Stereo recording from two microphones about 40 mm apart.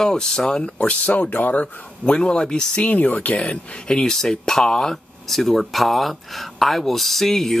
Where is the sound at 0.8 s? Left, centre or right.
Left.